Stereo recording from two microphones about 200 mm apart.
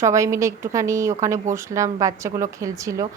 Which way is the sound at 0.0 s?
15° right (ahead or behind).